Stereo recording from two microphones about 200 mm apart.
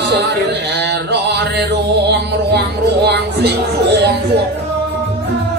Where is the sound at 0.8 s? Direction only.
55° right (ahead or behind).